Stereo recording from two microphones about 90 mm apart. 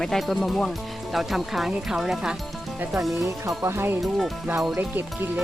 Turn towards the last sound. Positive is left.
turn(degrees=-20)  # may be behind; listen again after turning